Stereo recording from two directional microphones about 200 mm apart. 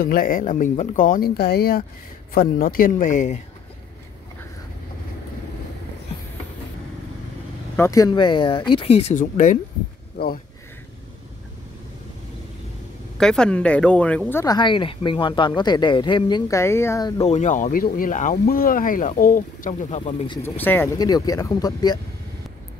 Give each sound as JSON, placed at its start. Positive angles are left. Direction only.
{"t": 0.0, "sound": "speech", "side_deg": 45}
{"t": 7.7, "sound": "speech", "side_deg": 15}
{"t": 13.2, "sound": "speech", "side_deg": 5}
{"t": 17.2, "sound": "speech", "side_deg": 35}
{"t": 20.4, "sound": "speech", "side_deg": 10}